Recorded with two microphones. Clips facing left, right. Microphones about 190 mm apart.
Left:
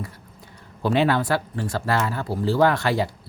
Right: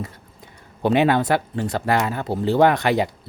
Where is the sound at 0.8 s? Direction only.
20° right (ahead or behind).